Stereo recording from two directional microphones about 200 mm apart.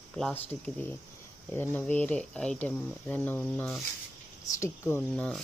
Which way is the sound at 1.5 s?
10° left (ahead or behind).